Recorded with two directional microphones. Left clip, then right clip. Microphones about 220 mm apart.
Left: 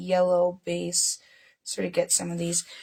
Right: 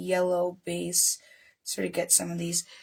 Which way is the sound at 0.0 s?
20° left (ahead or behind).